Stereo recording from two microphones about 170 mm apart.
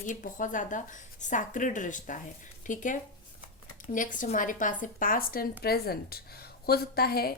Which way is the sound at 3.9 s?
50° left (ahead or behind).